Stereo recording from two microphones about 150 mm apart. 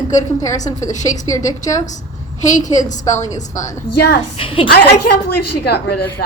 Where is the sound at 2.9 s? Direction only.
50° left (ahead or behind).